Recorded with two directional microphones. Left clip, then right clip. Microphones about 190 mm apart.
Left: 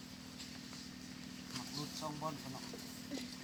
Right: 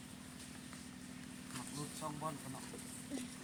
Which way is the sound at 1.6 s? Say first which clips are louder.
Left 3 dB; 25° right (ahead or behind).